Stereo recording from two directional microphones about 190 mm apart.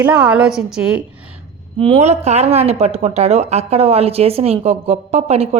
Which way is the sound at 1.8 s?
30° right (ahead or behind).